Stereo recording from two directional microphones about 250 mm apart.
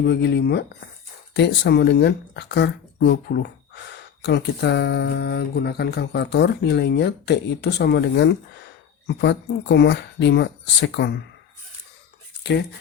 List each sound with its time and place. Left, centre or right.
0.0 s speech: left
12.4 s speech: left